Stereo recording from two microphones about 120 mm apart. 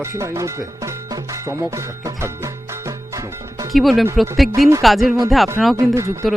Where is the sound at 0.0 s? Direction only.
25° right (ahead or behind).